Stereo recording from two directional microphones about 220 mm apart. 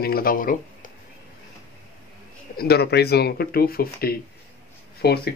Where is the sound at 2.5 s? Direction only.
45° left (ahead or behind).